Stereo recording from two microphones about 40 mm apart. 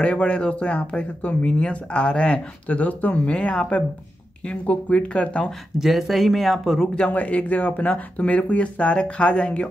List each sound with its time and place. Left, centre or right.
0.0 s speech: left
3.2 s speech: left
5.8 s speech: centre
7.1 s speech: left